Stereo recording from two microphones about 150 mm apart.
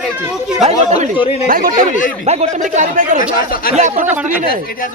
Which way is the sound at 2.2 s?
45° right (ahead or behind).